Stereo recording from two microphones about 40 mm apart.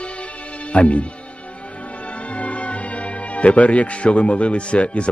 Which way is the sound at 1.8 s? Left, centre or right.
Left.